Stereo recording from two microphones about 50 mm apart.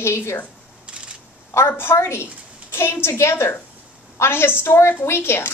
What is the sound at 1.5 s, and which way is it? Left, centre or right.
A woman's voice, left.